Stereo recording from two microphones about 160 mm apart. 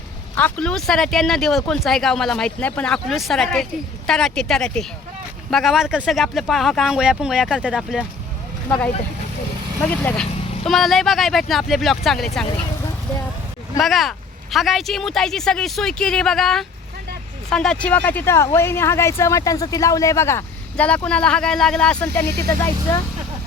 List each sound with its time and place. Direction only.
0.3 s speech: 10° left (ahead or behind)
9.9 s speech: 10° left (ahead or behind)
13.7 s speech: centre (ahead or behind)